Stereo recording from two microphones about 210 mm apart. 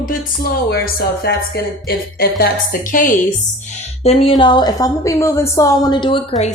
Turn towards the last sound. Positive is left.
turn(degrees=25)  # may be behind; listen again after turning